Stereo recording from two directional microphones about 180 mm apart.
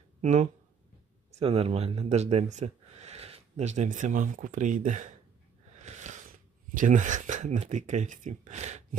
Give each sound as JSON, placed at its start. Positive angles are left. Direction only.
{"t": 0.2, "sound": "speech", "side_deg": -40}
{"t": 5.8, "sound": "a sound", "side_deg": -40}
{"t": 6.7, "sound": "speech", "side_deg": -45}